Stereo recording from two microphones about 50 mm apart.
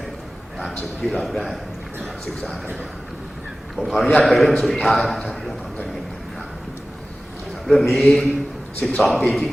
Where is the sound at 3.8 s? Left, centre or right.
Centre.